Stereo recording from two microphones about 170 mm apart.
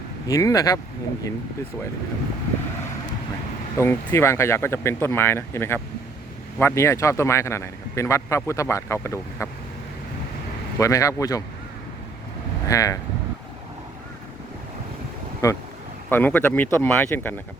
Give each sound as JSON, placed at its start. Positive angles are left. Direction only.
{"t": 0.3, "sound": "speech", "side_deg": 20}
{"t": 3.8, "sound": "speech", "side_deg": 15}
{"t": 10.8, "sound": "speech", "side_deg": 20}
{"t": 12.6, "sound": "speech", "side_deg": 20}
{"t": 15.4, "sound": "speech", "side_deg": 20}